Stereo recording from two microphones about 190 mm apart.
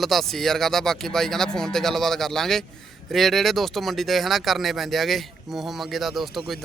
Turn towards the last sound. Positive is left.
turn(degrees=0)  # may be behind; listen again after turning